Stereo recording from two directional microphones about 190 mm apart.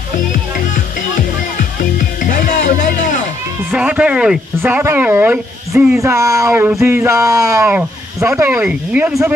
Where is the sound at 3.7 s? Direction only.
5° right (ahead or behind).